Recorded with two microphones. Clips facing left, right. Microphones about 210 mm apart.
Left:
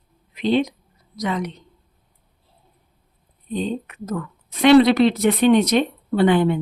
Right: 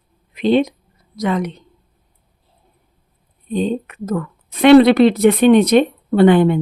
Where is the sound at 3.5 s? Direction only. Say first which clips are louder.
Right 5 dB; 55° right (ahead or behind).